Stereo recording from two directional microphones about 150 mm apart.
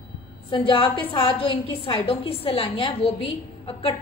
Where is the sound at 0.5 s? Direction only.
35° left (ahead or behind).